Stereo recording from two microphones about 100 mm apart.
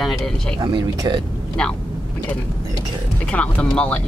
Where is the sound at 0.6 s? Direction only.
50° right (ahead or behind).